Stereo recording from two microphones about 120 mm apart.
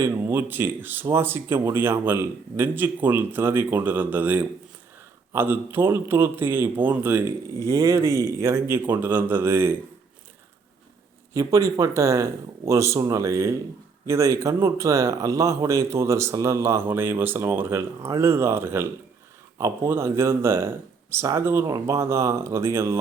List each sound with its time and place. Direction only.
0.0 s speech: 20° right (ahead or behind)
11.3 s speech: 25° right (ahead or behind)